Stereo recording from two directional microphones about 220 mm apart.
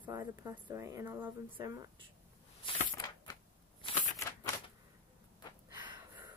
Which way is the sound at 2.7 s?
15° left (ahead or behind).